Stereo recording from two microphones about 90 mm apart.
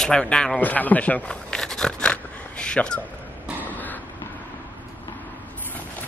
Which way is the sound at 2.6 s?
10° left (ahead or behind).